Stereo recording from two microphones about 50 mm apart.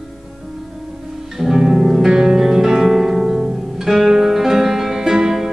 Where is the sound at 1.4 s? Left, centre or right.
Centre.